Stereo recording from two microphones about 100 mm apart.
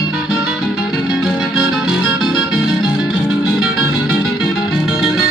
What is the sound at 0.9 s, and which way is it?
Music, 5° right (ahead or behind).